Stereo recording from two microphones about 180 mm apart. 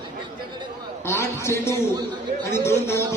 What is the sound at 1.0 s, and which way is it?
A man's voice, 15° left (ahead or behind).